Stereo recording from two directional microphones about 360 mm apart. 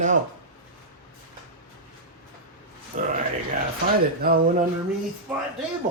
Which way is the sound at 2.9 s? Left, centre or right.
Right.